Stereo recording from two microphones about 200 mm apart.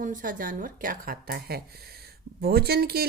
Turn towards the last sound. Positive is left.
turn(degrees=-50)  # may be behind; listen again after turning